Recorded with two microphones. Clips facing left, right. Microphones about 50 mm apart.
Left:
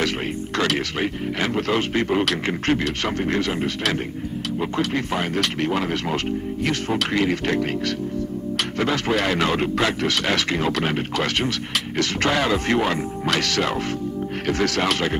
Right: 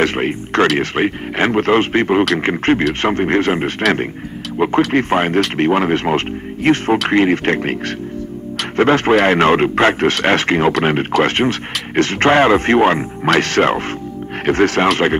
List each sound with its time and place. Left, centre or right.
0.0 s speech: right